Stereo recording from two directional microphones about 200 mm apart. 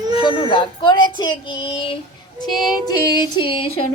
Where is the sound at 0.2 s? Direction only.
25° left (ahead or behind).